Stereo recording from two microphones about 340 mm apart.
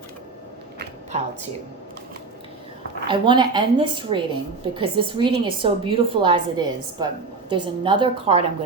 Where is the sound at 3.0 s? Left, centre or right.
Centre.